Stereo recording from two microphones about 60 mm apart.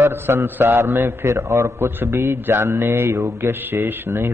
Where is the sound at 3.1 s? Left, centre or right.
Right.